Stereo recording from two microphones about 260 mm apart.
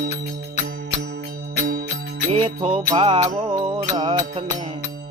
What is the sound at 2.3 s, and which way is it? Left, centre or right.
Music, right.